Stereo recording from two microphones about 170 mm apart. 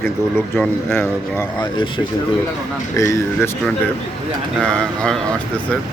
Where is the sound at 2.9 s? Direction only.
20° left (ahead or behind).